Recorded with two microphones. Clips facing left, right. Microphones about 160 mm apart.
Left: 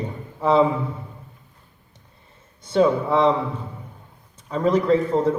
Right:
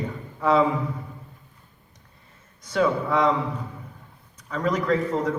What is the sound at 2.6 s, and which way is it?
Speech, 30° left (ahead or behind).